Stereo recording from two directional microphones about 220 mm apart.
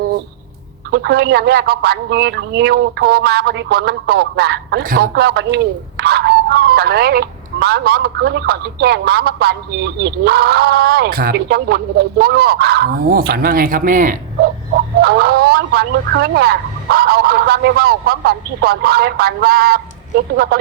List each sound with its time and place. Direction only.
0.9 s speech: 50° right (ahead or behind)